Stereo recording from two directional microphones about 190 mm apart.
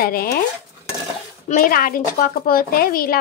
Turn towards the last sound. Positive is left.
turn(degrees=50)  # may be behind; listen again after turning